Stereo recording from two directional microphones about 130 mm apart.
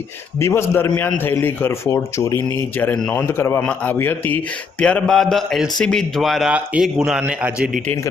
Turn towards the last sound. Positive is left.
turn(degrees=-5)  # may be behind; listen again after turning